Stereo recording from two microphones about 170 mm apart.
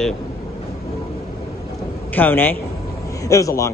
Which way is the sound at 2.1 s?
10° left (ahead or behind).